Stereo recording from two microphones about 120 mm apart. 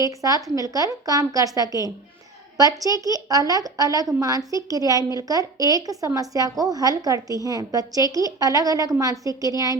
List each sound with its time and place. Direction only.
0.0 s a woman's voice: 30° right (ahead or behind)